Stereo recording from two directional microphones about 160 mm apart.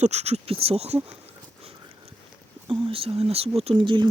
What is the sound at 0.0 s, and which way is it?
Speech, 45° right (ahead or behind).